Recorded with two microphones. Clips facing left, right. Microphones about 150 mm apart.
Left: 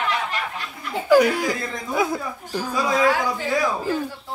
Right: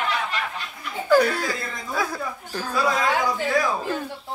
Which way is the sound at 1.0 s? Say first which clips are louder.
Left 3 dB; 10° left (ahead or behind).